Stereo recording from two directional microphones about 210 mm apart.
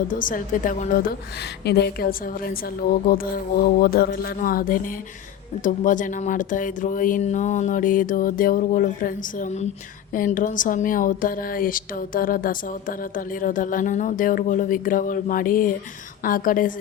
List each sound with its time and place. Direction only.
0.1 s a woman's voice: 40° left (ahead or behind)